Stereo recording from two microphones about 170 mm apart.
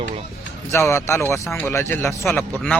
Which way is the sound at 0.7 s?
15° left (ahead or behind).